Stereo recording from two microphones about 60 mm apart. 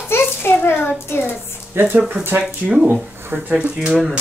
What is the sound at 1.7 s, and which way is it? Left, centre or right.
Speech, right.